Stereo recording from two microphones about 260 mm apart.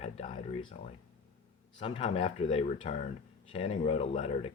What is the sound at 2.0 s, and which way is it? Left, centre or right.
Speech, left.